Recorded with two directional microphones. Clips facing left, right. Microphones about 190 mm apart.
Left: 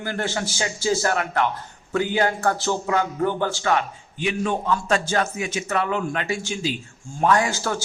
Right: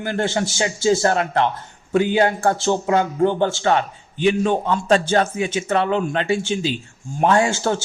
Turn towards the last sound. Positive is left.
turn(degrees=-25)  # may be behind; listen again after turning